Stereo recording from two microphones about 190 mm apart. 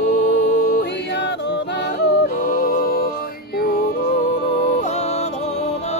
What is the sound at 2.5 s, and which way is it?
Music, 50° left (ahead or behind).